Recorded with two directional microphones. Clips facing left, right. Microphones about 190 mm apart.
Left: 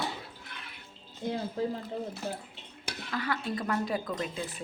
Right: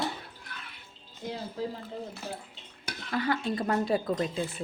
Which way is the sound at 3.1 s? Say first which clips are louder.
Right 4 dB; 30° right (ahead or behind).